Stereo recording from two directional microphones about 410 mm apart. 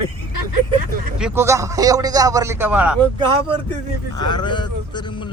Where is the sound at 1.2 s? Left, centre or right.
Centre.